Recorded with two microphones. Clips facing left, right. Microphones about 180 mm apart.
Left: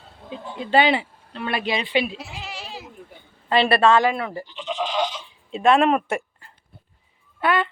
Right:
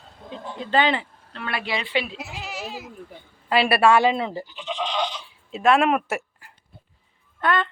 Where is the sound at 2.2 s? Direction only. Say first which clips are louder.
Right 2 dB; 5° right (ahead or behind); by 4.4 s 20° right (ahead or behind).